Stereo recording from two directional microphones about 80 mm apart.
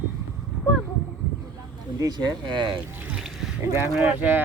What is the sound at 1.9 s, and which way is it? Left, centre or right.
Speech, right.